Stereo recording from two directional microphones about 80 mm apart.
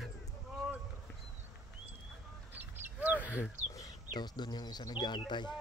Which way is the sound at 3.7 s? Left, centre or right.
Left.